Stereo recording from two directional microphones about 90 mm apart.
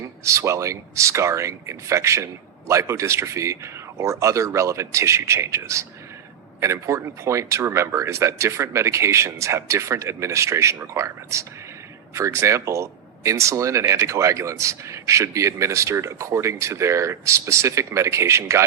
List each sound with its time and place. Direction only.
0.3 s speech: 35° right (ahead or behind)